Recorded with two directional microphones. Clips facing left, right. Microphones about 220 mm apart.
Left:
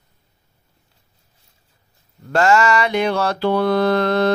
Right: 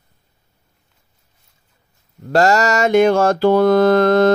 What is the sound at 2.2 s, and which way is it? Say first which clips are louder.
Mantra: right 1 dB; 40° right (ahead or behind).